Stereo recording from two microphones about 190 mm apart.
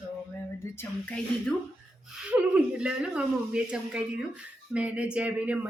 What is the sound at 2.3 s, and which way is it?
Speech, 5° right (ahead or behind).